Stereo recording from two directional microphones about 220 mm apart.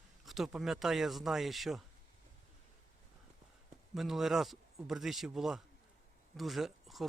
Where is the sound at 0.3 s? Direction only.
Centre (ahead or behind).